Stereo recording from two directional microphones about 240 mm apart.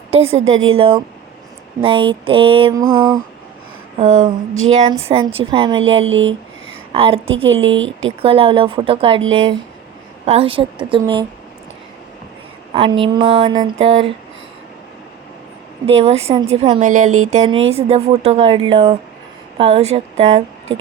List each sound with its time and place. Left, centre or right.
0.1 s speech: right
6.1 s a woman's voice: right
6.9 s speech: right
7.5 s a woman's voice: right
8.2 s speech: right
10.2 s speech: right
12.7 s speech: right
15.9 s speech: right